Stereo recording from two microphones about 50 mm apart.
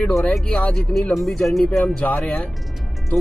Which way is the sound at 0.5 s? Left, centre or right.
Left.